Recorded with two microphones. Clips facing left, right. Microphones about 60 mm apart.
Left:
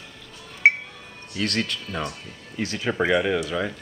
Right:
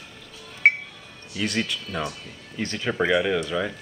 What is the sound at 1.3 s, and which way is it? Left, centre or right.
Speech, centre.